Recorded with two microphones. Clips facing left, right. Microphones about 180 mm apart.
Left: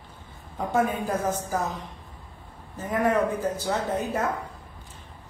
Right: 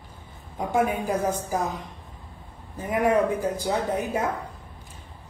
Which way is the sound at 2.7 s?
10° right (ahead or behind).